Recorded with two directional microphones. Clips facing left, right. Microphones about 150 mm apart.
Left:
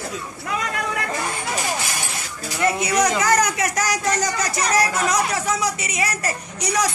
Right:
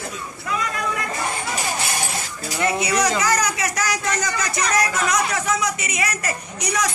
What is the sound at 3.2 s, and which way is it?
Speech, 55° left (ahead or behind).